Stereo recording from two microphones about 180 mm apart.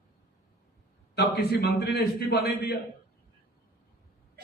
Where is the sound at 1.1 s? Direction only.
65° left (ahead or behind).